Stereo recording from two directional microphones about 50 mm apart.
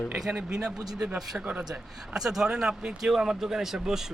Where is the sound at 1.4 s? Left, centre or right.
Right.